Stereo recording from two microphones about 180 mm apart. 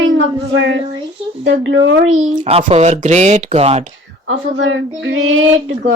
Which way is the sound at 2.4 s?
35° right (ahead or behind).